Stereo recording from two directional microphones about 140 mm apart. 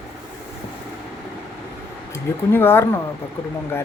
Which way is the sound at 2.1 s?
15° left (ahead or behind).